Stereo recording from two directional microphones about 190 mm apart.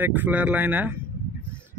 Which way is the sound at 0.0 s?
10° right (ahead or behind).